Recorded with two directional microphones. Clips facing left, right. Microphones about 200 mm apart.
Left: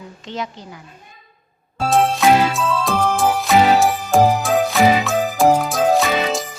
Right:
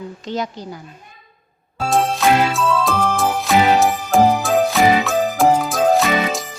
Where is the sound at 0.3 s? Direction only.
40° right (ahead or behind).